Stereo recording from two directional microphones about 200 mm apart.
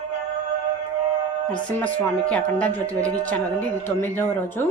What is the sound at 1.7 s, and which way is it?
Speech, 5° left (ahead or behind).